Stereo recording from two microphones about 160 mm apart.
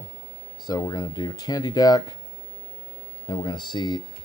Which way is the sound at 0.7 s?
25° left (ahead or behind).